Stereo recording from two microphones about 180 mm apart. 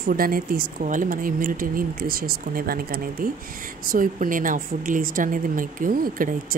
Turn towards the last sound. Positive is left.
turn(degrees=-50)  # may be behind; listen again after turning